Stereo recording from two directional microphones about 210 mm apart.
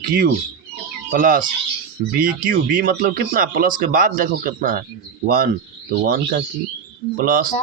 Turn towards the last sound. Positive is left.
turn(degrees=-45)  # may be behind; listen again after turning